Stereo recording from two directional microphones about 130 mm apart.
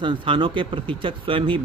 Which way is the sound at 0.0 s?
35° right (ahead or behind).